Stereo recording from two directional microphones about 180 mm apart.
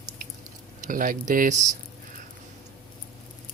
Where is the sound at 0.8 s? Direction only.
50° right (ahead or behind).